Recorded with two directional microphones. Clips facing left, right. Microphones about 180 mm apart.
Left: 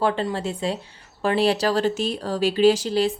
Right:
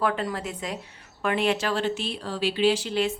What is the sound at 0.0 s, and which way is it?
A woman's voice, 30° left (ahead or behind).